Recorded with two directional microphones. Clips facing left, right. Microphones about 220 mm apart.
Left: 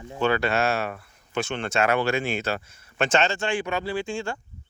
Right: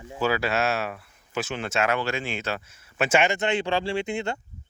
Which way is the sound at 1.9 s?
55° left (ahead or behind).